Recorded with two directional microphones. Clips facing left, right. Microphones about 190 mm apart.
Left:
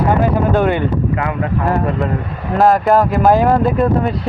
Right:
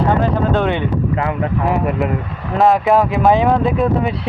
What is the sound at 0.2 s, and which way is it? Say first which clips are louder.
Speech: left 2 dB; 5° left (ahead or behind).